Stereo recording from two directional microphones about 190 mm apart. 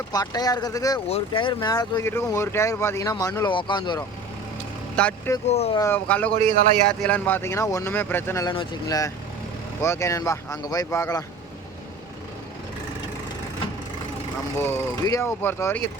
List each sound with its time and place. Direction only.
0.1 s speech: 20° left (ahead or behind)
1.0 s speech: 30° left (ahead or behind)
4.9 s speech: 10° left (ahead or behind)
5.5 s speech: 35° left (ahead or behind)
5.8 s speech: 10° left (ahead or behind)
14.6 s speech: 10° left (ahead or behind)